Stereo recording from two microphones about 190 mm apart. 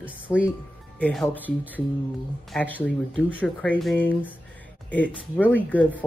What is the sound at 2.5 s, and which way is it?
A woman's voice, 10° left (ahead or behind).